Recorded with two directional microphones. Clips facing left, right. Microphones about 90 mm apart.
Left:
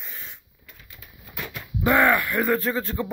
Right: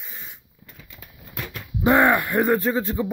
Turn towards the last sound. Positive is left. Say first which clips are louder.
# right 3 dB
turn(degrees=-15)  # may be behind; listen again after turning